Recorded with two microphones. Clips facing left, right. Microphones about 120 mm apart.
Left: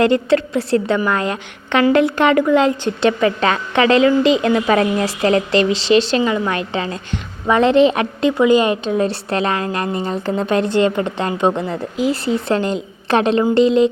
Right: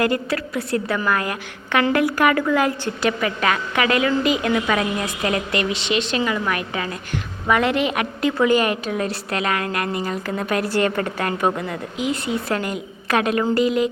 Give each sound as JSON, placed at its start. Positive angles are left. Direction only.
{"t": 0.0, "sound": "a woman's voice", "side_deg": 25}